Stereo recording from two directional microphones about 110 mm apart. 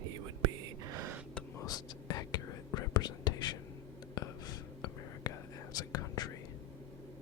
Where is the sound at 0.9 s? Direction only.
30° right (ahead or behind).